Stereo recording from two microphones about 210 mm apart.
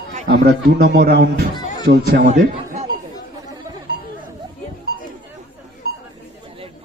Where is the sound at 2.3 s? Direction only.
35° right (ahead or behind).